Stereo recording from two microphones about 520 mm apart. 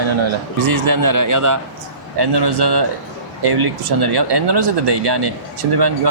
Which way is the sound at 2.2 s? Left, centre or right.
Right.